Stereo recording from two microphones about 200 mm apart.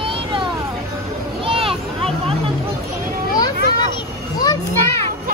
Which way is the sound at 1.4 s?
25° right (ahead or behind).